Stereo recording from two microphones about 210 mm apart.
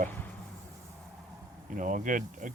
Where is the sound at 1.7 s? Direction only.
40° right (ahead or behind).